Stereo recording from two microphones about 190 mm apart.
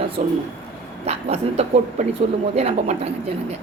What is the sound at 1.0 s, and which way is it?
A woman's voice, 35° right (ahead or behind).